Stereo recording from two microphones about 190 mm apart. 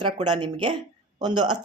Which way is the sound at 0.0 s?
25° right (ahead or behind).